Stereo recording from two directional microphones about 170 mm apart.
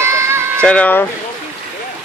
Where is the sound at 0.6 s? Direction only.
5° left (ahead or behind).